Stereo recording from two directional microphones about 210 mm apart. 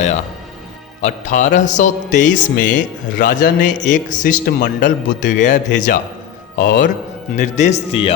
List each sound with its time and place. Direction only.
1.0 s speech: 35° left (ahead or behind)